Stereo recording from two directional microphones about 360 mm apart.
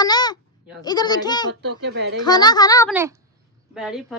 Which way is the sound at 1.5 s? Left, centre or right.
Right.